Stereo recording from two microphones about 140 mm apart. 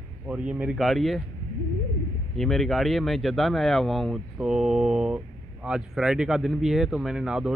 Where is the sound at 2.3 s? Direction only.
Centre (ahead or behind).